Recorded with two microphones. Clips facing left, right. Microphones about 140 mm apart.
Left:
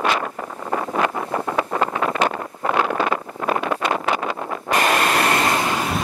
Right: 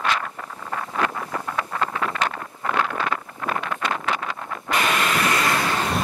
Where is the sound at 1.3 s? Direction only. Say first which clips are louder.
Left 7 dB; 30° left (ahead or behind).